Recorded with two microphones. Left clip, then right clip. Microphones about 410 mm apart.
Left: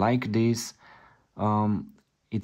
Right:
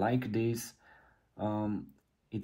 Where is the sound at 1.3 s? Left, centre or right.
Left.